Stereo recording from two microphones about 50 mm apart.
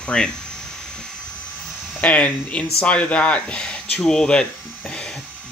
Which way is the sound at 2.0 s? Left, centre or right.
Left.